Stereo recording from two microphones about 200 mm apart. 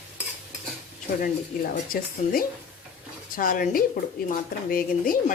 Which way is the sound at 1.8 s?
45° left (ahead or behind).